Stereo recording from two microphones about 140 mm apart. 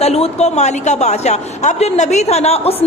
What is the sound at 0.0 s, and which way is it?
A woman's voice, 50° left (ahead or behind).